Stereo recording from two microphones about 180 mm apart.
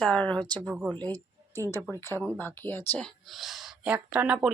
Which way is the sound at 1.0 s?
10° left (ahead or behind).